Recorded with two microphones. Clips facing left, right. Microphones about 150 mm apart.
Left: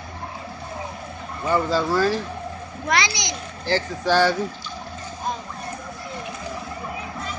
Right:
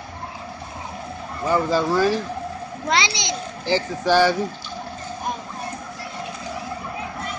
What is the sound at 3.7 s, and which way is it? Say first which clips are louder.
Speech: right 2 dB; 10° right (ahead or behind).